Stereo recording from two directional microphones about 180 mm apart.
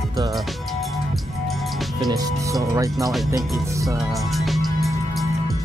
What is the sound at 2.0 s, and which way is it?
Speech, 20° right (ahead or behind).